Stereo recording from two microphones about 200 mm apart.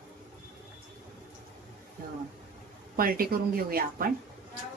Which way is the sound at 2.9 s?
45° right (ahead or behind).